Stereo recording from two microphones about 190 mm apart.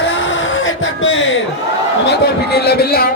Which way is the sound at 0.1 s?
75° left (ahead or behind).